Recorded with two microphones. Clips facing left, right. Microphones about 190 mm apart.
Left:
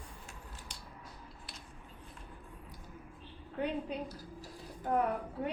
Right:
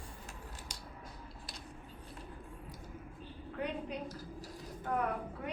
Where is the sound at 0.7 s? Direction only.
40° right (ahead or behind).